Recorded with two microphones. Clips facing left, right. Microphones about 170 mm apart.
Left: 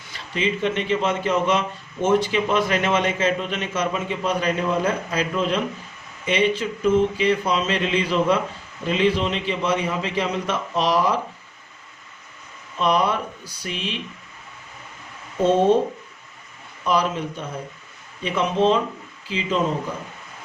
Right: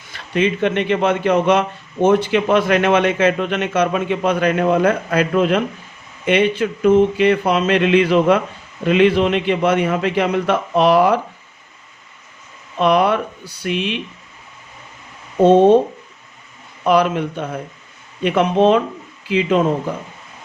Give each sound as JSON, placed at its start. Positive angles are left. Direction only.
{"t": 0.1, "sound": "a man's voice", "side_deg": -60}
{"t": 12.8, "sound": "a man's voice", "side_deg": -65}
{"t": 16.8, "sound": "a man's voice", "side_deg": -65}